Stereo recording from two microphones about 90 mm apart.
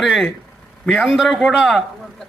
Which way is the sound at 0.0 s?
Centre (ahead or behind).